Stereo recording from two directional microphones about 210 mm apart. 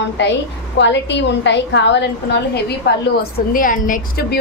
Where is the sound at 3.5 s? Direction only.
40° left (ahead or behind).